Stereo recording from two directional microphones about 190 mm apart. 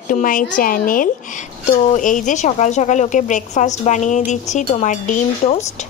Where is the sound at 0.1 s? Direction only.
45° left (ahead or behind).